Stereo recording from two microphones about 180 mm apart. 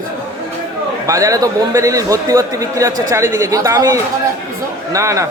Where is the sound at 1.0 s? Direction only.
15° right (ahead or behind).